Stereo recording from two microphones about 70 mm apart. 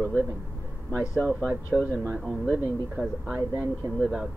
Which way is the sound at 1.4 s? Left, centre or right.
Centre.